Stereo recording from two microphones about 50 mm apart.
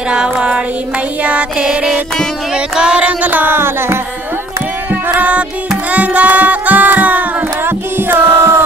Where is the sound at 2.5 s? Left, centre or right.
Centre.